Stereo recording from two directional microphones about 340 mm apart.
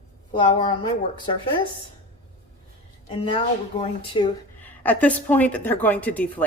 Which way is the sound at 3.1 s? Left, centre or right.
Centre.